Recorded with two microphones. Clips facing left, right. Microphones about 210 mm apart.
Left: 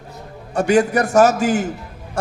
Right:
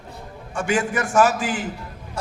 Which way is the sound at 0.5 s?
40° left (ahead or behind).